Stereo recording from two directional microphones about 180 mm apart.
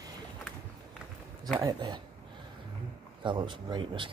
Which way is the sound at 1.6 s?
25° right (ahead or behind).